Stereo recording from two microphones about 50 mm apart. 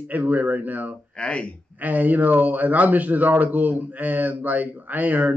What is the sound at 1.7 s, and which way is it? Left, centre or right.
Speech, right.